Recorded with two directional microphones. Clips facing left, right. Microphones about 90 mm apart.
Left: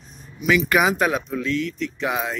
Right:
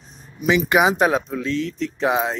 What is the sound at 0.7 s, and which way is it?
Speech, 25° right (ahead or behind).